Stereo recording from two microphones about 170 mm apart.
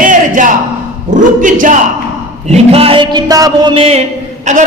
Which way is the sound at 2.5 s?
35° right (ahead or behind).